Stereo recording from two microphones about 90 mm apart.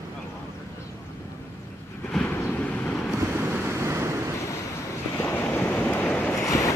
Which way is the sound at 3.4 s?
25° right (ahead or behind).